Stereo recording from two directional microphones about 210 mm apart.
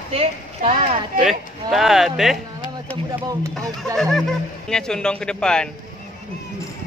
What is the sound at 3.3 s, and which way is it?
Speech, 15° right (ahead or behind).